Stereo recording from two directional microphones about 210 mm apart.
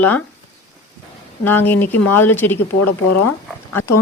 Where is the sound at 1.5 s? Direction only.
10° left (ahead or behind).